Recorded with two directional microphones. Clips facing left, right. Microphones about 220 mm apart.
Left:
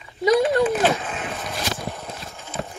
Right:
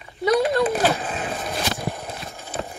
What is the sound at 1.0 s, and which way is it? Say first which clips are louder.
Speech: right 2 dB; 30° right (ahead or behind).